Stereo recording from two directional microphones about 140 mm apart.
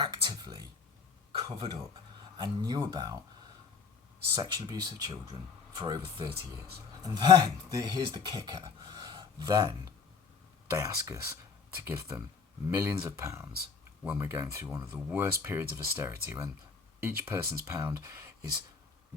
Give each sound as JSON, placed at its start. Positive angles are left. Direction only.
{"t": 0.0, "sound": "a sound", "side_deg": -35}
{"t": 1.3, "sound": "speech", "side_deg": -40}
{"t": 4.4, "sound": "speech", "side_deg": -30}